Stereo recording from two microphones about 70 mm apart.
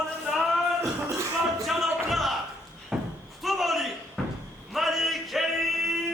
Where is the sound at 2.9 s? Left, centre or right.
Centre.